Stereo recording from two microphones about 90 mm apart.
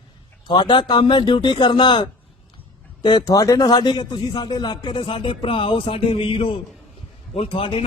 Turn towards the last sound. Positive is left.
turn(degrees=90)